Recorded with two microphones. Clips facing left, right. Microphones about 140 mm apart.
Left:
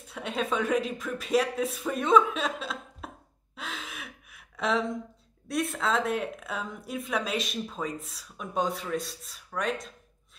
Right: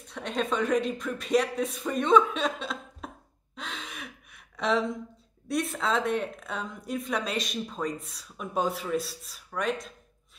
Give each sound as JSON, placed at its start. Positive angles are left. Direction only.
{"t": 0.1, "sound": "a woman's voice", "side_deg": 5}
{"t": 3.5, "sound": "gasp", "side_deg": 5}
{"t": 5.5, "sound": "a woman's voice", "side_deg": 0}